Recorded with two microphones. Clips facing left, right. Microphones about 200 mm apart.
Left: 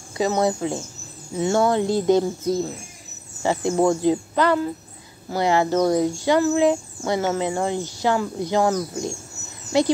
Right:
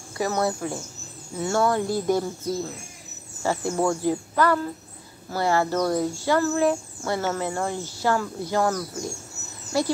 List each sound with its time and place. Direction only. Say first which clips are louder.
0.2 s speech: left 4 dB; 20° left (ahead or behind)